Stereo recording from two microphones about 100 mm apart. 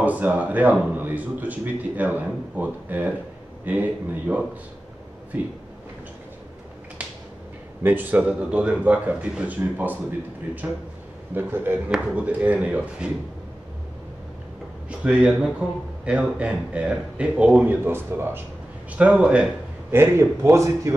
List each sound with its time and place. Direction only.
0.0 s a man's voice: 15° right (ahead or behind)
7.8 s a man's voice: 20° right (ahead or behind)
11.3 s a man's voice: 20° right (ahead or behind)
14.9 s a man's voice: 10° right (ahead or behind)
18.9 s a man's voice: 10° right (ahead or behind)
19.9 s a man's voice: 25° right (ahead or behind)